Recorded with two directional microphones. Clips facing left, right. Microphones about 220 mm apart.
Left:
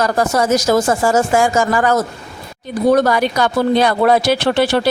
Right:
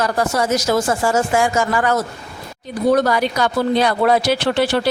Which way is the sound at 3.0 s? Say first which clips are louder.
Left 2 dB; 55° left (ahead or behind).